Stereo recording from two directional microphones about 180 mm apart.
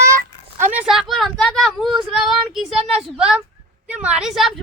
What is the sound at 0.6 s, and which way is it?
A woman's voice, 10° right (ahead or behind).